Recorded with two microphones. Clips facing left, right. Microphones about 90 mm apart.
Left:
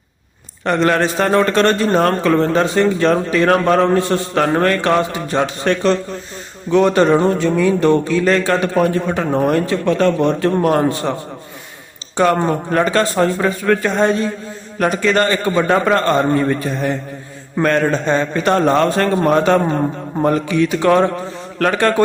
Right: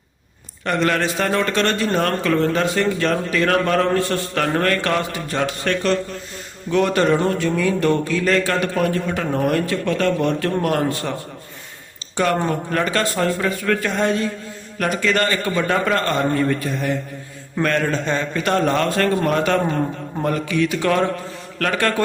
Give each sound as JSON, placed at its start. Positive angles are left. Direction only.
{"t": 0.6, "sound": "a man's voice", "side_deg": 30}
{"t": 12.1, "sound": "a man's voice", "side_deg": 30}